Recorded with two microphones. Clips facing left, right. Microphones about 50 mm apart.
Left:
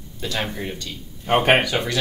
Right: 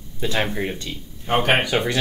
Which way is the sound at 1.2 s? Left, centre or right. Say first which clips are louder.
Left 2 dB; centre.